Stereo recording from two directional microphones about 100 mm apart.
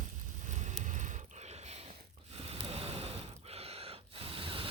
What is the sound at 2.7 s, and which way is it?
Gasp, 80° right.